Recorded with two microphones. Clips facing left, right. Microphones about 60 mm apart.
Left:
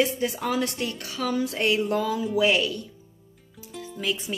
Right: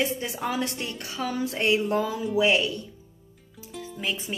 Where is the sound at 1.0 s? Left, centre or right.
Centre.